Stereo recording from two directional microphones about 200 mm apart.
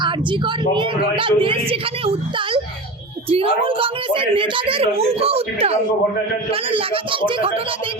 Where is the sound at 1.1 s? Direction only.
25° right (ahead or behind).